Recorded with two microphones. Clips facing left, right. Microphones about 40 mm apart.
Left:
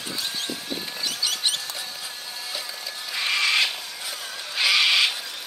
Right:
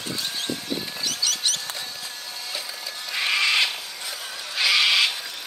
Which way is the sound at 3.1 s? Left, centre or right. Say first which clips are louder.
Right 1 dB; centre.